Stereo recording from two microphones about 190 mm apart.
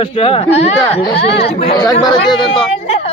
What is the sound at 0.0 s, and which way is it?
Speech, 30° left (ahead or behind).